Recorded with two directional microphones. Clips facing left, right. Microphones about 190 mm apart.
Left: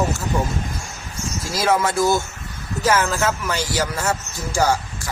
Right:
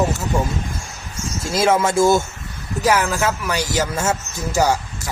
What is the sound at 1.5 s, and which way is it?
Speech, 25° right (ahead or behind).